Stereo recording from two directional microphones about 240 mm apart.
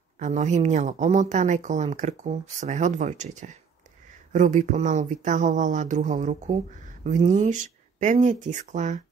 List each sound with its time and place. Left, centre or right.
0.2 s a woman's voice: right